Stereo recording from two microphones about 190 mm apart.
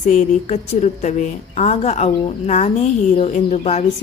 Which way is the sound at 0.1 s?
40° left (ahead or behind).